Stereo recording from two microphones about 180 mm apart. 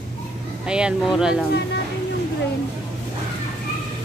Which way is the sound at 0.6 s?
5° right (ahead or behind).